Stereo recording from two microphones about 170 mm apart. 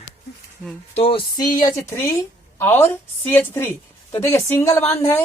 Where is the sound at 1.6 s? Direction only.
15° left (ahead or behind).